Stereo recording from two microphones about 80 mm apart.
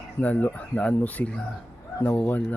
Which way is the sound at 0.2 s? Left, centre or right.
Left.